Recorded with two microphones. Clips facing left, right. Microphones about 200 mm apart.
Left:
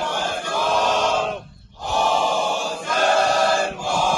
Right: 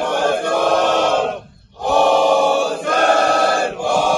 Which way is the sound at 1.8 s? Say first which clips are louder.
Right 8 dB; 60° right (ahead or behind).